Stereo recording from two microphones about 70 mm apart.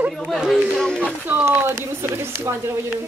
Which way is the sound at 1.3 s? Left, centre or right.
Right.